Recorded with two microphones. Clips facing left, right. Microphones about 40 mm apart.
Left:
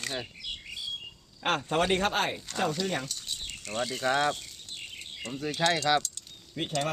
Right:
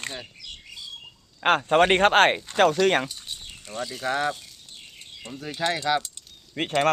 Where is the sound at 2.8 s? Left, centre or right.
Right.